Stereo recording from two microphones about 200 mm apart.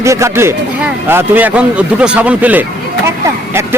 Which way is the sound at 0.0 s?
15° right (ahead or behind).